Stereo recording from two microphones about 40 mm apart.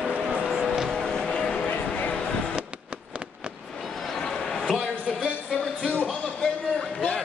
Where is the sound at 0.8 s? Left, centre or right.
Centre.